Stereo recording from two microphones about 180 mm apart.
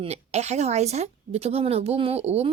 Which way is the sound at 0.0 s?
35° right (ahead or behind).